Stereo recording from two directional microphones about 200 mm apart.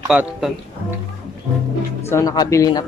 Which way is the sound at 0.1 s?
5° right (ahead or behind).